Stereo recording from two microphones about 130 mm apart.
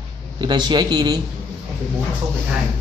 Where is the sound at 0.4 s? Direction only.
35° right (ahead or behind).